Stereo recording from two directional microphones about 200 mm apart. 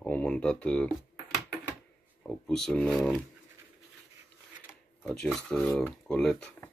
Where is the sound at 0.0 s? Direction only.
5° left (ahead or behind).